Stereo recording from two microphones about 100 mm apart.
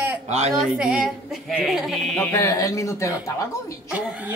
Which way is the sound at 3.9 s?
10° right (ahead or behind).